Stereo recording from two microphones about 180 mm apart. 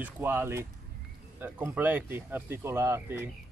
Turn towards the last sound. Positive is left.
turn(degrees=-15)  # may be behind; listen again after turning